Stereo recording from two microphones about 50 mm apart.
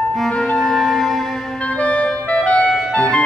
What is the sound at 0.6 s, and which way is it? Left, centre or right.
Music, centre.